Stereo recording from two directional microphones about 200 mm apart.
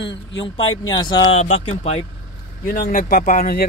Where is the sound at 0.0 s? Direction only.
60° left (ahead or behind).